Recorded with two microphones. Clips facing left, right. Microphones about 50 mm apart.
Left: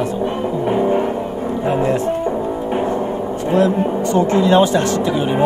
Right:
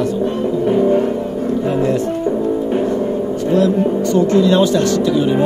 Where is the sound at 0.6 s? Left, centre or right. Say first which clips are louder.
Right 3 dB; centre.